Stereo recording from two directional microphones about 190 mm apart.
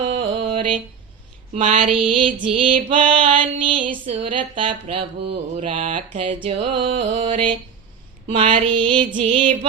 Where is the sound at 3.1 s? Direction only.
30° right (ahead or behind).